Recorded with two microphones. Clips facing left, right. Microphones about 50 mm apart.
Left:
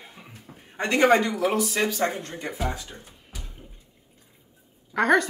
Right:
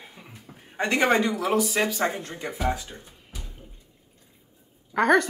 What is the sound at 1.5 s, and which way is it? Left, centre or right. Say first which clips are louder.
Speech: right 1 dB; centre.